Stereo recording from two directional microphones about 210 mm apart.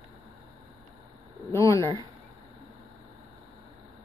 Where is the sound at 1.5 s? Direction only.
15° left (ahead or behind).